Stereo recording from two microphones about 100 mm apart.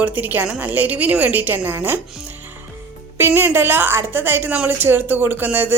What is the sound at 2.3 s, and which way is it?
Music, 20° right (ahead or behind).